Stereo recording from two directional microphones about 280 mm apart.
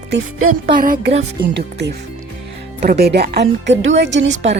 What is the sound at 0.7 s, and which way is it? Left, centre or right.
Speech, right.